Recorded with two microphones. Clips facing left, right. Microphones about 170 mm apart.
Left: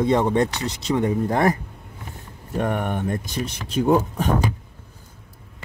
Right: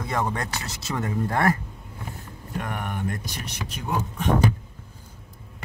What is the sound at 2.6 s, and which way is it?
Speech, 25° left (ahead or behind).